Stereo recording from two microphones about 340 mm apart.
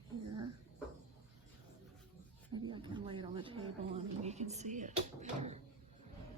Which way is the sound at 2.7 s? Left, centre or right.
Centre.